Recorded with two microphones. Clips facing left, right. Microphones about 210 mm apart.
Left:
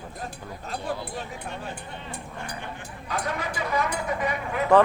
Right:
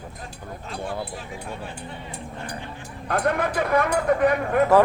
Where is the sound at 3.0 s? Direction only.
55° right (ahead or behind).